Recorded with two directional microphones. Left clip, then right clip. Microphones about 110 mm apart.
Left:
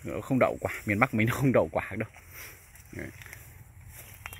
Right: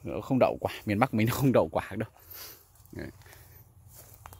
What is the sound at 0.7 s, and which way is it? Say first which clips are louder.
Speech: left 1 dB; 70° right (ahead or behind).